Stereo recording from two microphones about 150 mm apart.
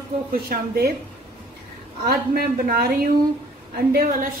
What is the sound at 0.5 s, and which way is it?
Speech, 85° right.